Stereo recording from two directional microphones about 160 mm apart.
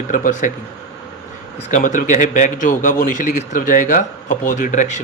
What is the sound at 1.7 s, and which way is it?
A man's voice, 55° left (ahead or behind).